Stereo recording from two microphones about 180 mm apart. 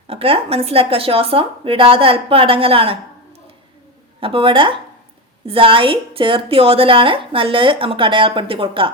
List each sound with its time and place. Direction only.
0.1 s a woman's voice: 30° right (ahead or behind)
4.2 s a woman's voice: 30° right (ahead or behind)